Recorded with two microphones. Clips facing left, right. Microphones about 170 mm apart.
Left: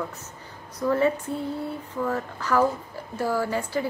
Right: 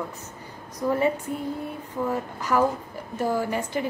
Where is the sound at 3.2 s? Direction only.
20° right (ahead or behind).